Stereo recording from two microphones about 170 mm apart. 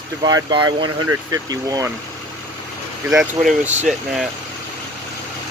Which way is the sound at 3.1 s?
Centre (ahead or behind).